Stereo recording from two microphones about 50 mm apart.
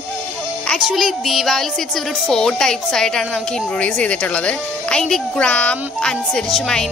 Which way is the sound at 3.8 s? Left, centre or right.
Left.